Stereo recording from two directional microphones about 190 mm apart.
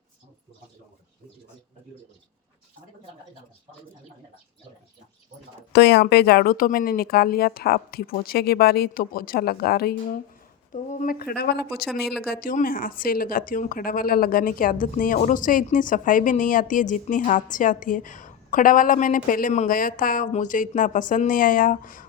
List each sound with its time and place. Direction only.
5.7 s speech: 60° left (ahead or behind)
11.0 s speech: 50° left (ahead or behind)